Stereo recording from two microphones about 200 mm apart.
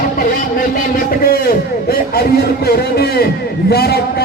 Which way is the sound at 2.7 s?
50° left (ahead or behind).